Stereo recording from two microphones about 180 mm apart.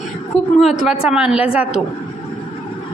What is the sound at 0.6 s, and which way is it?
A woman's voice, centre (ahead or behind).